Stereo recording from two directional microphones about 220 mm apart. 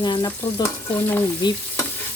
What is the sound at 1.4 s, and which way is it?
Stir, 20° left (ahead or behind).